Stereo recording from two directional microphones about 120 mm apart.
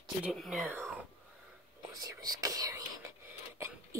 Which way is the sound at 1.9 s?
30° right (ahead or behind).